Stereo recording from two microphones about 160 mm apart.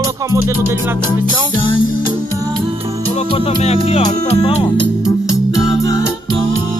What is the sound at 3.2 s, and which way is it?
Speech, 40° left (ahead or behind).